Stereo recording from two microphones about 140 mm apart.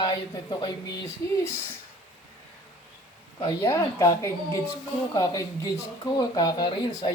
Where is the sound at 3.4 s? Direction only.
20° left (ahead or behind).